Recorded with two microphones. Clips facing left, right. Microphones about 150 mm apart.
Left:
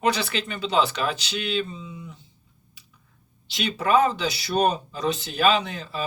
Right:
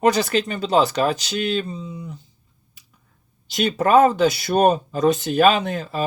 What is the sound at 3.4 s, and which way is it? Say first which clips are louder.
Speech: right 6 dB; 45° right (ahead or behind).